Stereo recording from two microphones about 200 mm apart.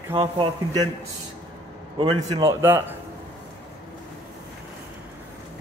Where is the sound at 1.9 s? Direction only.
25° right (ahead or behind).